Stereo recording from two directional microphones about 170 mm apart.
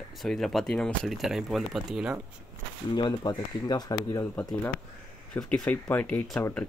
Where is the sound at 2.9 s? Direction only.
25° left (ahead or behind).